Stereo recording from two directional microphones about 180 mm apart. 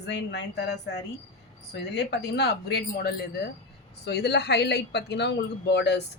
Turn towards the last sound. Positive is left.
turn(degrees=70)  # may be behind; listen again after turning